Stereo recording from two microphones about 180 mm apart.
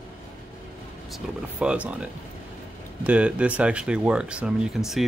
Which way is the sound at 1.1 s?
5° right (ahead or behind).